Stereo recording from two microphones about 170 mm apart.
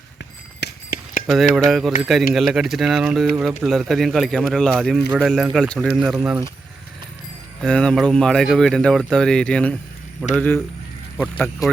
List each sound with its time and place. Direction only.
0.6 s clip-clop: 65° left (ahead or behind)
1.5 s speech: centre (ahead or behind)
7.6 s speech: 5° left (ahead or behind)
11.3 s speech: centre (ahead or behind)